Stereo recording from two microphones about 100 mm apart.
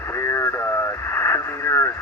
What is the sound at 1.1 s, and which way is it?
Radio, 25° left (ahead or behind).